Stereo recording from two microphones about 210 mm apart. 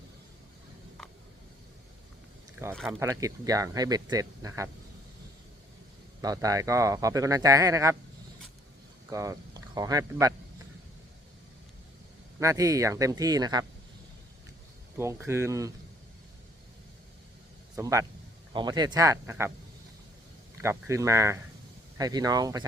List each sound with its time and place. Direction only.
3.0 s speech: 15° right (ahead or behind)
6.2 s speech: 15° right (ahead or behind)
9.0 s speech: 15° right (ahead or behind)
12.4 s speech: 15° right (ahead or behind)
14.9 s speech: 15° right (ahead or behind)
17.7 s a man's voice: 15° right (ahead or behind)
20.6 s speech: 15° right (ahead or behind)